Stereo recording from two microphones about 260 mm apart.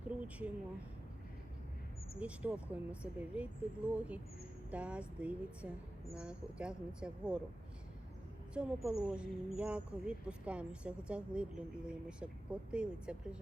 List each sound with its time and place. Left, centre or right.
0.1 s a sound: centre
2.1 s speech: centre
8.5 s speech: centre